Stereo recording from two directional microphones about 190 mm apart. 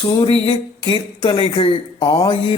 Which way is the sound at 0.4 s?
25° left (ahead or behind).